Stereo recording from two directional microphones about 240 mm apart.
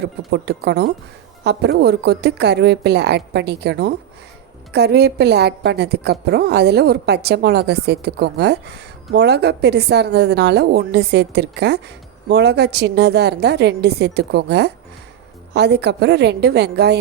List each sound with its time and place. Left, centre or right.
0.0 s a woman's voice: right